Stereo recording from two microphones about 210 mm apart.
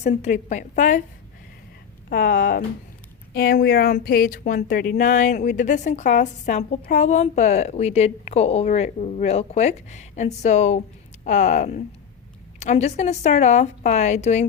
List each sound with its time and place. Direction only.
0.0 s a woman's voice: 35° left (ahead or behind)
2.0 s a woman's voice: 40° left (ahead or behind)